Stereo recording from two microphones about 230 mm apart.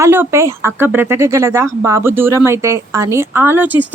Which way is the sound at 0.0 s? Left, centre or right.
Centre.